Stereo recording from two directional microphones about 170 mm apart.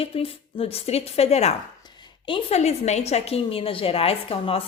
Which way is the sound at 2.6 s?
40° left (ahead or behind).